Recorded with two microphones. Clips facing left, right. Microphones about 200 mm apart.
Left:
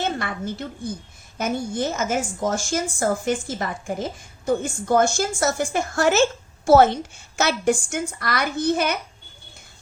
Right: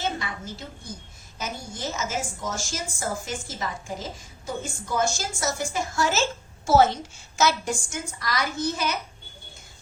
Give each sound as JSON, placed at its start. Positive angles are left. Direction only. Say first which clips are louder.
{"t": 0.0, "sound": "a woman's voice", "louder": "left 5 dB", "side_deg": 60}